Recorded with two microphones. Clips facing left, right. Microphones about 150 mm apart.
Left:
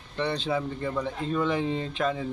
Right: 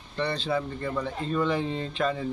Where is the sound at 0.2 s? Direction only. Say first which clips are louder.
Even; 15° left (ahead or behind).